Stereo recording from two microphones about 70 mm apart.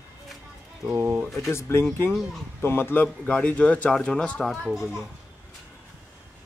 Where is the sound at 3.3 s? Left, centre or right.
Centre.